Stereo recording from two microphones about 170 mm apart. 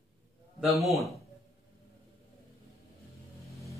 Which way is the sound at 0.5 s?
Centre (ahead or behind).